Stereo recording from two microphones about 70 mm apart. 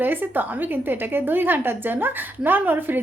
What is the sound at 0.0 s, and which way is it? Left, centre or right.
A woman's voice, right.